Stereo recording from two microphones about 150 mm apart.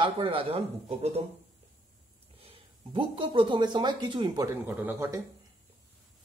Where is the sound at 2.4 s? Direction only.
40° right (ahead or behind).